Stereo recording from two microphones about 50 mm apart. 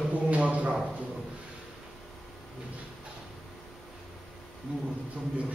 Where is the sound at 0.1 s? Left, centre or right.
Right.